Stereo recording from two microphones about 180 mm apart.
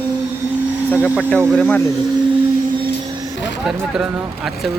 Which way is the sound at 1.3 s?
5° left (ahead or behind).